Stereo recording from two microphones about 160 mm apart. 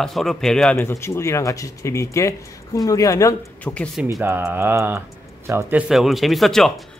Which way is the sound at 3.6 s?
10° left (ahead or behind).